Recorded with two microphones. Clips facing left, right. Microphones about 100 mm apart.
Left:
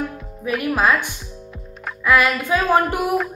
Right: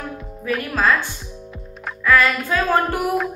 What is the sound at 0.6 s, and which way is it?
A woman's voice, 15° left (ahead or behind).